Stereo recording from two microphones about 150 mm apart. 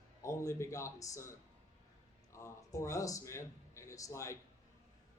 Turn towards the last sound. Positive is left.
turn(degrees=20)  # may be behind; listen again after turning